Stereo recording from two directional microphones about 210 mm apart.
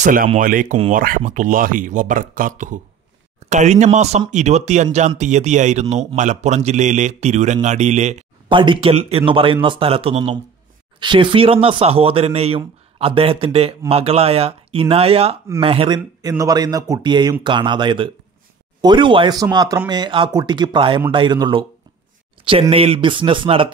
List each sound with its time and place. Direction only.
0.0 s speech: 40° right (ahead or behind); by 23.7 s 25° right (ahead or behind)